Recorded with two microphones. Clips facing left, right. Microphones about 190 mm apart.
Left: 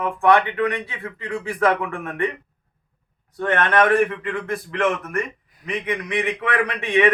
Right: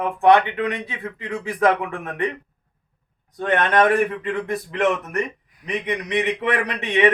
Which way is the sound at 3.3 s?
15° right (ahead or behind).